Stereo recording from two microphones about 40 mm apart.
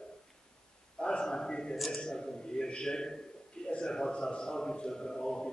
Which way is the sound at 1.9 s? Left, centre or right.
Centre.